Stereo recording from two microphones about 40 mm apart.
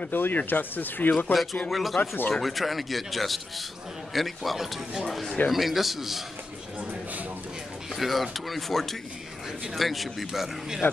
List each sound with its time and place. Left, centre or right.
0.1 s speech: left
1.3 s speech: centre
2.0 s speech: left
2.4 s speech: centre
7.9 s speech: centre